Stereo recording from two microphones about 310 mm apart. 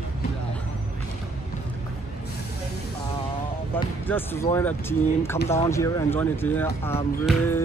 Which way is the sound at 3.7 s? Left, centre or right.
Centre.